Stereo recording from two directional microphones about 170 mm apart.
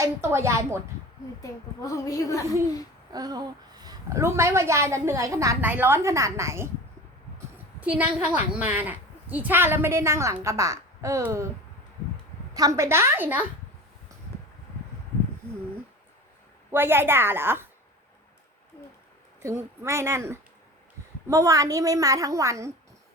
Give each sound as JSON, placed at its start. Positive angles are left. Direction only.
{"t": 0.0, "sound": "a woman's voice", "side_deg": -15}
{"t": 1.4, "sound": "a woman's voice", "side_deg": 20}
{"t": 3.1, "sound": "a woman's voice", "side_deg": -20}
{"t": 7.3, "sound": "a sound", "side_deg": -10}
{"t": 8.5, "sound": "a woman's voice", "side_deg": -10}
{"t": 12.5, "sound": "a woman's voice", "side_deg": -20}
{"t": 16.7, "sound": "a woman's voice", "side_deg": -15}
{"t": 19.4, "sound": "a woman's voice", "side_deg": -15}